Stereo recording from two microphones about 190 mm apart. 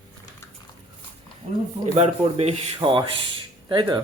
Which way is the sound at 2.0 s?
35° right (ahead or behind).